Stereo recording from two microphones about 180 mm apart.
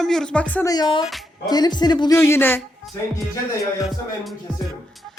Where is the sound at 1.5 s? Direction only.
25° left (ahead or behind).